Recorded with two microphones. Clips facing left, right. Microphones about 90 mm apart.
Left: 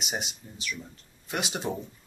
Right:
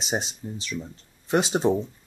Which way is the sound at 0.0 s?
30° right (ahead or behind).